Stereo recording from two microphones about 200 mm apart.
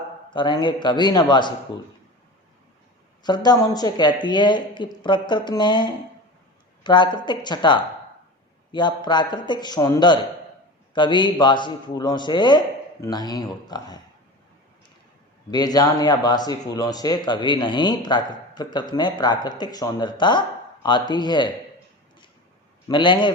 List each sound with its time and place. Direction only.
0.3 s speech: 25° left (ahead or behind)
3.2 s speech: 20° left (ahead or behind)
15.4 s speech: 20° left (ahead or behind)
22.9 s speech: 25° left (ahead or behind)